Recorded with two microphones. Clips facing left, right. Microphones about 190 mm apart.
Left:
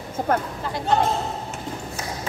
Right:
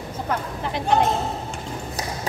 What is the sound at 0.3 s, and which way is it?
Speech, 50° left (ahead or behind).